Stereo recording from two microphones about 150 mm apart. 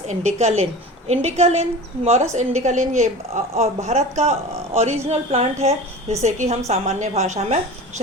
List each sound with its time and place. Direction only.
0.1 s a woman's voice: 50° right (ahead or behind)